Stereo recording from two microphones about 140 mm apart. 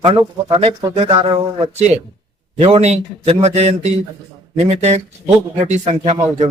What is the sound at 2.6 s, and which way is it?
Speech, 45° right (ahead or behind).